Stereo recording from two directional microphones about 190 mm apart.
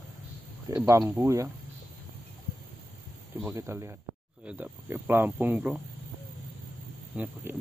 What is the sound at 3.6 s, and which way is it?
Speech, 15° right (ahead or behind).